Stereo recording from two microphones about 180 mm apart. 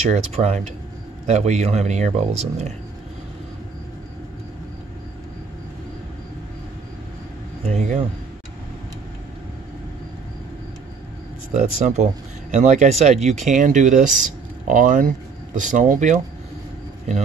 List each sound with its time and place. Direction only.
0.0 s speech: 35° right (ahead or behind)
7.7 s speech: 40° right (ahead or behind)
11.5 s speech: 40° right (ahead or behind)